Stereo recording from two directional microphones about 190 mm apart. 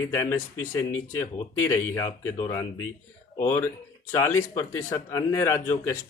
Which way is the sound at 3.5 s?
10° left (ahead or behind).